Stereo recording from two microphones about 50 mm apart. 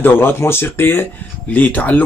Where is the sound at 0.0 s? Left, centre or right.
Left.